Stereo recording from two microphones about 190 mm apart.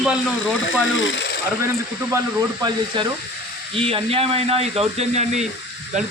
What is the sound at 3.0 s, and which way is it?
Frying, 25° right (ahead or behind).